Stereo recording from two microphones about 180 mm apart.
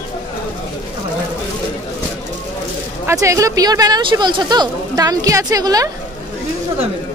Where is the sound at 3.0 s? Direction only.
15° right (ahead or behind).